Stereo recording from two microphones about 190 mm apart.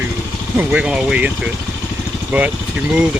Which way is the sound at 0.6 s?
5° right (ahead or behind).